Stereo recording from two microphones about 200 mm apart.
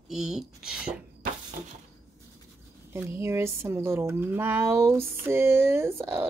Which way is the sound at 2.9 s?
10° right (ahead or behind).